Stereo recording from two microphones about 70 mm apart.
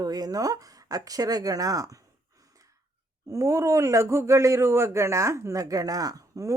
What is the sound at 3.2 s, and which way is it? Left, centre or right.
Speech, right.